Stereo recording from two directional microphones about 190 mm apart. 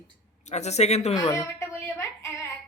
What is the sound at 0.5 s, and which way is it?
Speech, 35° left (ahead or behind).